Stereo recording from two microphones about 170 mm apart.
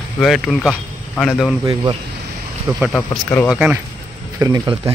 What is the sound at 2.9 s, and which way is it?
Speech, 10° left (ahead or behind).